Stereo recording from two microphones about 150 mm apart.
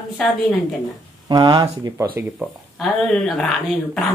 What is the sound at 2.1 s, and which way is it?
Speech, 5° right (ahead or behind).